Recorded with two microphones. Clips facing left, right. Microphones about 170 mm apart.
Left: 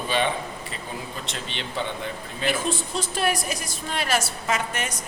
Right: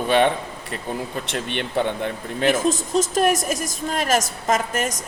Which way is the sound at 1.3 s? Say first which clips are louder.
Right 9 dB; 60° right (ahead or behind).